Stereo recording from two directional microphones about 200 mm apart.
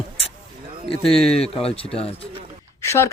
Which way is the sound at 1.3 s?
30° left (ahead or behind).